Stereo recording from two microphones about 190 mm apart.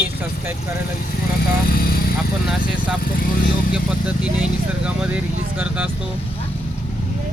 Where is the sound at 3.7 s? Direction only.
5° right (ahead or behind).